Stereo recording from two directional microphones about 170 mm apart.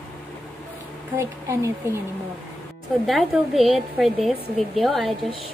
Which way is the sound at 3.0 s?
Centre (ahead or behind).